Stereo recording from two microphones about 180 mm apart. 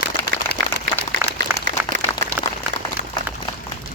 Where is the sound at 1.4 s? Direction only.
45° right (ahead or behind).